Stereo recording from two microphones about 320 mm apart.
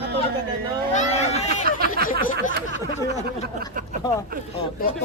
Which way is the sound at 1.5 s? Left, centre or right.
Right.